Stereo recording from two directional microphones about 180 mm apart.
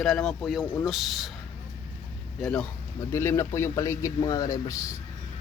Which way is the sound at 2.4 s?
5° left (ahead or behind).